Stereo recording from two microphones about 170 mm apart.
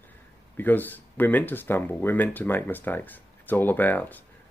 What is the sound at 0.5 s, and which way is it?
Speech, 10° left (ahead or behind).